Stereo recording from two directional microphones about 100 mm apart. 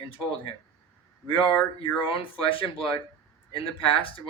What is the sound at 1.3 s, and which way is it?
Speech, 55° left (ahead or behind).